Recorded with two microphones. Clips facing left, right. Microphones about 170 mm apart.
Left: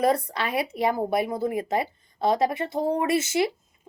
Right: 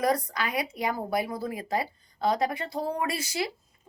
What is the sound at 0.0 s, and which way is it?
Speech, 30° left (ahead or behind).